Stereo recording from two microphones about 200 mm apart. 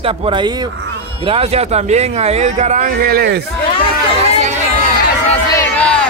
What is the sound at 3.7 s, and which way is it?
Chatter, 25° left (ahead or behind).